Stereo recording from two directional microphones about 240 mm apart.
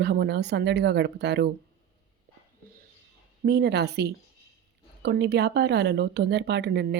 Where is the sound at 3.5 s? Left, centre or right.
Right.